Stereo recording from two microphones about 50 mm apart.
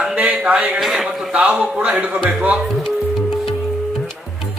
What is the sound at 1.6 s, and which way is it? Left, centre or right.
A man's voice, right.